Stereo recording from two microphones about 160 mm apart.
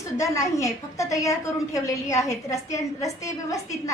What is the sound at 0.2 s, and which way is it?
A woman's voice, 20° left (ahead or behind).